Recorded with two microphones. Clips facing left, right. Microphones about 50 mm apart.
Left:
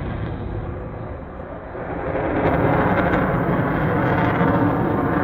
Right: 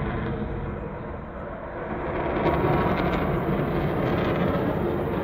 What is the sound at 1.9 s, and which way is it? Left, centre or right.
Vehicle, centre.